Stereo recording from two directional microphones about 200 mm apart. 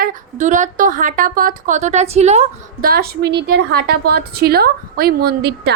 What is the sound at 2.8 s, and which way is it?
A woman's voice, 50° right (ahead or behind).